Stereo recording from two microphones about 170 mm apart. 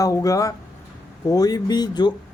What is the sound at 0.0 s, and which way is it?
Speech, 20° left (ahead or behind).